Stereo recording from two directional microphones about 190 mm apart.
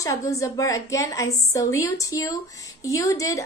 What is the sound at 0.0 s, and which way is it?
A woman's voice, 15° left (ahead or behind).